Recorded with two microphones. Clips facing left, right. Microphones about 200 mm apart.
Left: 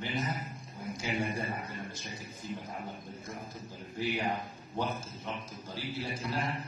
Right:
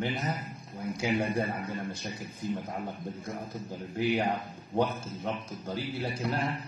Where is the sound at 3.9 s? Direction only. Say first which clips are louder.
Right 5 dB; 60° right (ahead or behind).